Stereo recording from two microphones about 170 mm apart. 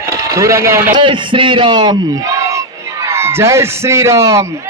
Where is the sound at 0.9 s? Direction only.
30° right (ahead or behind).